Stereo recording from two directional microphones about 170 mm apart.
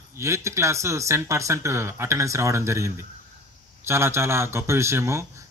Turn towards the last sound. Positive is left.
turn(degrees=-15)  # may be behind; listen again after turning